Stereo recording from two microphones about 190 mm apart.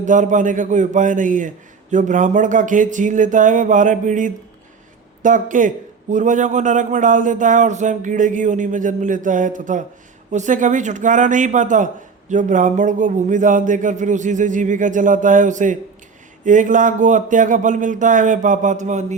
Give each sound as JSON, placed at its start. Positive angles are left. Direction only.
{"t": 0.0, "sound": "a man's voice", "side_deg": -40}